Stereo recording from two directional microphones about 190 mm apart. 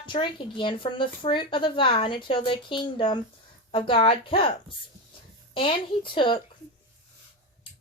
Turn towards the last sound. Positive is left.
turn(degrees=25)  # may be behind; listen again after turning